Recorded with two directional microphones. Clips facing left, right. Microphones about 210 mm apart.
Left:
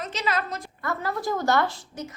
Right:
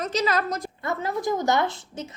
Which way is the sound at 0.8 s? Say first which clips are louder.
Right 1 dB; 20° right (ahead or behind).